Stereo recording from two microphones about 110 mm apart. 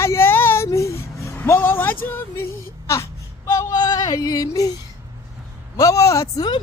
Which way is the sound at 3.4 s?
30° left (ahead or behind).